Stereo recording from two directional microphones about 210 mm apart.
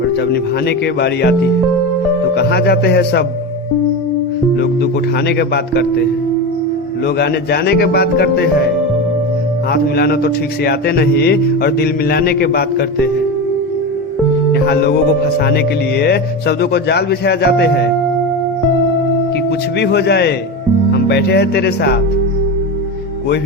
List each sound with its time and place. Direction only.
0.7 s speech: 50° left (ahead or behind)
4.5 s music: 55° left (ahead or behind)
5.4 s speech: 50° left (ahead or behind)
7.2 s speech: 50° left (ahead or behind)
9.7 s speech: 50° left (ahead or behind)
14.5 s speech: 50° left (ahead or behind)
19.8 s speech: 50° left (ahead or behind)